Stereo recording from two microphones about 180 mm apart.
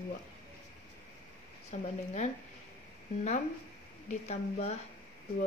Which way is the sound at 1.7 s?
40° left (ahead or behind).